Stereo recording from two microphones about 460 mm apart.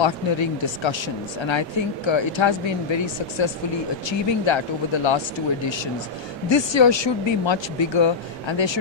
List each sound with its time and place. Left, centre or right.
0.0 s speech: left
6.5 s speech: left